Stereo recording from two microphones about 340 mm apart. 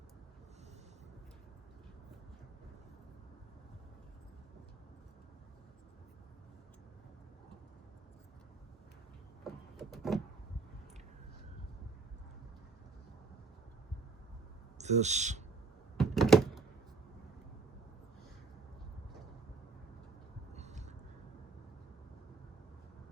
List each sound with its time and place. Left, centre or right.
9.4 s power windows: centre
14.8 s speech: centre
16.0 s door: centre
20.5 s a sound: centre